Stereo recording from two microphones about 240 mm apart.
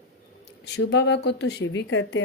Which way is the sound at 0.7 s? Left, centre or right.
Left.